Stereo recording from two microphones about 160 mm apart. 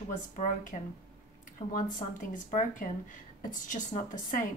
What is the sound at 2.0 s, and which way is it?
A woman's voice, 50° left (ahead or behind).